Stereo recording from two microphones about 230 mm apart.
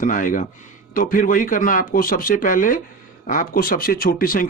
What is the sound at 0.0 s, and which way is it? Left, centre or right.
Speech, left.